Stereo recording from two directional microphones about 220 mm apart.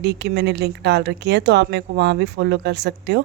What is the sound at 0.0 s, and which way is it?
Speech, 50° right (ahead or behind).